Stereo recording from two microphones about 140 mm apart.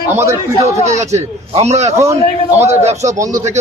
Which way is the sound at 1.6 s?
50° right (ahead or behind).